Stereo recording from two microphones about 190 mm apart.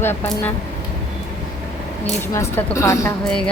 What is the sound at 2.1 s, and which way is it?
Speech, 15° left (ahead or behind).